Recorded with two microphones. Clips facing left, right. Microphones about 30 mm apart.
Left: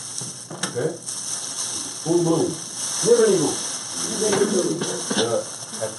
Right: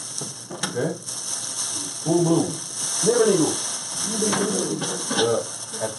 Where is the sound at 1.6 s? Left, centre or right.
Centre.